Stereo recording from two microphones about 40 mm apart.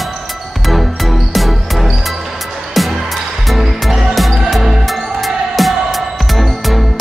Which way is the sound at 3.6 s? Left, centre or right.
Centre.